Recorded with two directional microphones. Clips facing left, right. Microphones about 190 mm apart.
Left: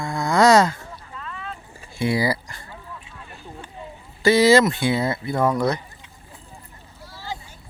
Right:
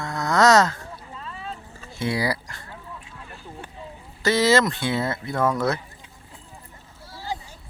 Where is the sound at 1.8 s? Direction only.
15° left (ahead or behind).